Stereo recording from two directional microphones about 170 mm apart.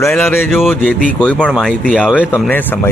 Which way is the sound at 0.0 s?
15° left (ahead or behind).